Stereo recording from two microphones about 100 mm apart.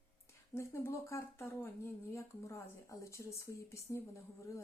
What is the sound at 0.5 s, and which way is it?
Speech, 25° left (ahead or behind).